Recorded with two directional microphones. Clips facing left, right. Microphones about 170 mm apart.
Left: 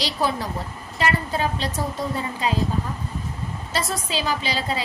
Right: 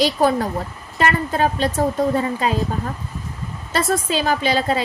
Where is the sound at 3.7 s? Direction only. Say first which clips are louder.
Right 7 dB; 55° right (ahead or behind).